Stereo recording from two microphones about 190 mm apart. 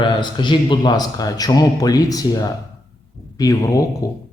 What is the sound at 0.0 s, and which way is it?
A man's voice, 25° left (ahead or behind).